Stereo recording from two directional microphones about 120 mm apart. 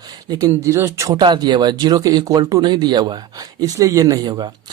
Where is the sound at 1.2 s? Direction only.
40° right (ahead or behind).